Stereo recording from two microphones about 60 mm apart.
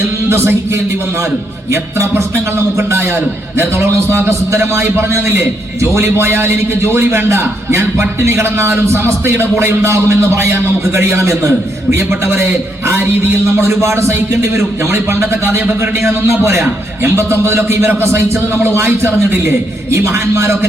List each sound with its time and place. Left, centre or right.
0.3 s a man's voice: right
11.9 s speech: right
13.8 s speech: right